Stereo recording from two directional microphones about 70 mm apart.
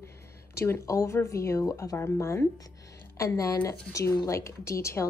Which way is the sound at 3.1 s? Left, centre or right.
Left.